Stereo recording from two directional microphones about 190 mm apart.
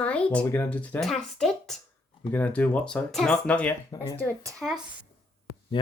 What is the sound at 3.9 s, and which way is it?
Speech, 20° left (ahead or behind).